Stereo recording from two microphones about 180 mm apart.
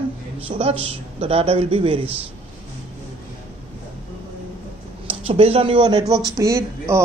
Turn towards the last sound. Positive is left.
turn(degrees=-15)  # may be behind; listen again after turning